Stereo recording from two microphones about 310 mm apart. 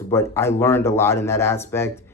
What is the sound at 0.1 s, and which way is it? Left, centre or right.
Speech, centre.